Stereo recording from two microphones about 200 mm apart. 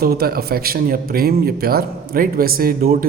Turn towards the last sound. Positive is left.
turn(degrees=-45)  # may be behind; listen again after turning